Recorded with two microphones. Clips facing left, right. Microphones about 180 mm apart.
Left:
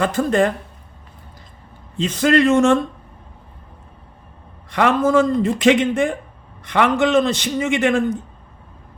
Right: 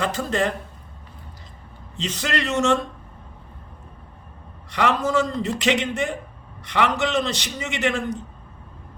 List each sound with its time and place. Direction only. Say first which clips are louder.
0.0 s a man's voice: left 6 dB; 50° left (ahead or behind)
2.0 s a man's voice: left 11 dB; 50° left (ahead or behind)
4.7 s a man's voice: left 5 dB; 50° left (ahead or behind)